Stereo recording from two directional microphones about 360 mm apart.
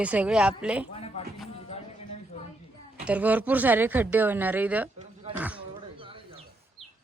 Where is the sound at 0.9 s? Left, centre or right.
Centre.